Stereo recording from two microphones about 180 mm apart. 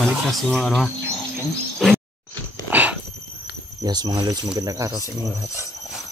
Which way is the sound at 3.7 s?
20° right (ahead or behind).